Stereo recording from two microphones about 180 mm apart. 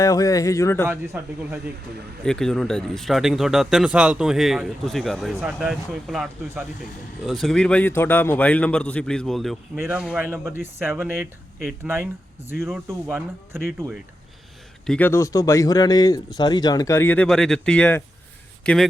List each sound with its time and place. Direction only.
0.0 s speech: 20° left (ahead or behind)
0.9 s speech: 15° right (ahead or behind)
2.2 s speech: 5° left (ahead or behind)
7.3 s speech: centre (ahead or behind)
9.7 s speech: 10° right (ahead or behind)
10.5 s speech: 10° right (ahead or behind)
13.1 s speech: 5° right (ahead or behind)
14.8 s speech: 10° left (ahead or behind)